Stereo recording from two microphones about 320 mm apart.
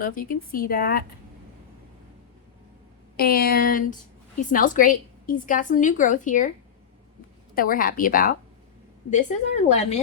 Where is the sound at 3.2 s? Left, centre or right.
Left.